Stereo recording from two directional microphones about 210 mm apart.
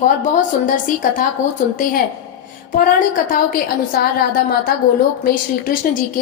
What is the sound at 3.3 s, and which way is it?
A woman's voice, 45° left (ahead or behind).